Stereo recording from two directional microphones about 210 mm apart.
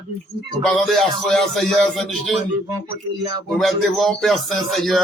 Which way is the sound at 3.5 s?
Centre (ahead or behind).